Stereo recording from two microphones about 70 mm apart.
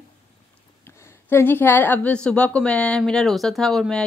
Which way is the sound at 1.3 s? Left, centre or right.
Left.